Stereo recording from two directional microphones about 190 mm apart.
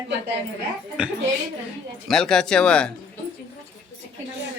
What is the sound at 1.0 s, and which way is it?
Speech, 5° right (ahead or behind).